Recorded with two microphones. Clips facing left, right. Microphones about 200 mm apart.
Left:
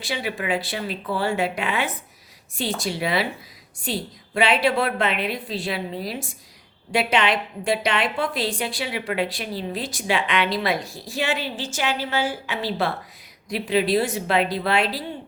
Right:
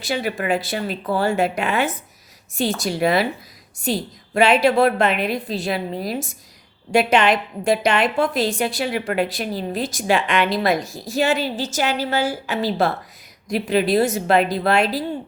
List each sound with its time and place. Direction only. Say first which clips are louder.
0.0 s a woman's voice: right 4 dB; 45° right (ahead or behind)
4.4 s a woman's voice: right 5 dB; 45° right (ahead or behind)